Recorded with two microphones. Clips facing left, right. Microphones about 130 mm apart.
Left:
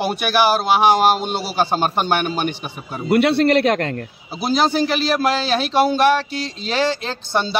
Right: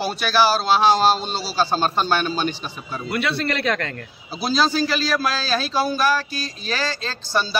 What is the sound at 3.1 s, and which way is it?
Speech, 65° left (ahead or behind).